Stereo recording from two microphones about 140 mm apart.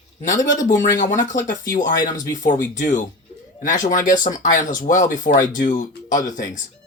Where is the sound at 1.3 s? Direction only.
65° left (ahead or behind).